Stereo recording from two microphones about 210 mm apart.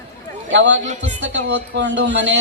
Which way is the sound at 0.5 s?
60° right (ahead or behind).